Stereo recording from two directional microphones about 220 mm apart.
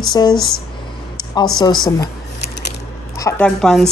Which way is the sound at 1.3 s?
20° left (ahead or behind).